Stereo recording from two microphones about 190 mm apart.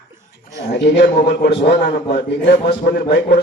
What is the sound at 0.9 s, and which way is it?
Speech, 60° left (ahead or behind).